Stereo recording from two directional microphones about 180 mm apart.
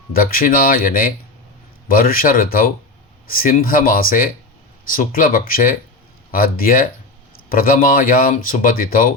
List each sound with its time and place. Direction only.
0.1 s speech: 55° left (ahead or behind)